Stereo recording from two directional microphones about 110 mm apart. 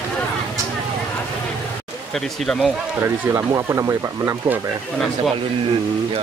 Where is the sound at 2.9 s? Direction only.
25° right (ahead or behind).